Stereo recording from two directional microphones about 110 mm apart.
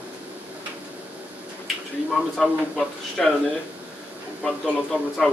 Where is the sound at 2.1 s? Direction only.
Centre (ahead or behind).